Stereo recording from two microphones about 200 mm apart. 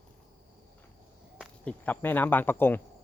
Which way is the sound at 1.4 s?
5° left (ahead or behind).